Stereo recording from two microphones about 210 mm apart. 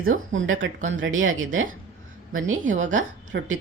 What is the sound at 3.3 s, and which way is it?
Speech, 55° right (ahead or behind).